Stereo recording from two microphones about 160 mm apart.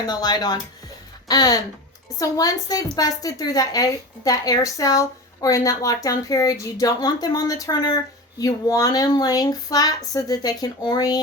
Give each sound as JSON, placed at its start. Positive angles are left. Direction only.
{"t": 0.1, "sound": "a woman's voice", "side_deg": 25}